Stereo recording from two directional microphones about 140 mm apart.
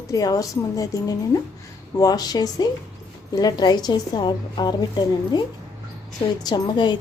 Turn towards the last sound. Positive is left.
turn(degrees=30)  # may be behind; listen again after turning